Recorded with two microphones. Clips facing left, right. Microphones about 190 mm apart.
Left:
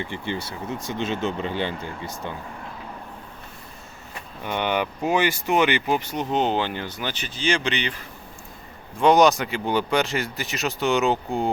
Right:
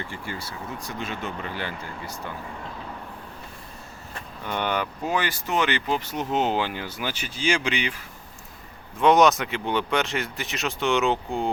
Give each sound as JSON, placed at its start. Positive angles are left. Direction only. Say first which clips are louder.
{"t": 0.0, "sound": "speech", "louder": "left 5 dB", "side_deg": 20}
{"t": 4.4, "sound": "speech", "louder": "left 2 dB", "side_deg": 10}
{"t": 6.1, "sound": "speech", "louder": "left 1 dB", "side_deg": -5}